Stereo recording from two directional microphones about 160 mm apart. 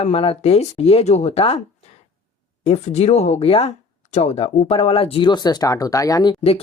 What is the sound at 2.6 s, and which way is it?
Speech, 40° left (ahead or behind).